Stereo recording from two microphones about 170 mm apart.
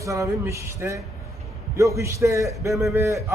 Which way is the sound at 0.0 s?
20° right (ahead or behind).